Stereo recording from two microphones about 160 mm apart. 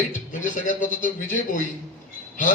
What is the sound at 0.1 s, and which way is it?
A man's voice, 50° left (ahead or behind).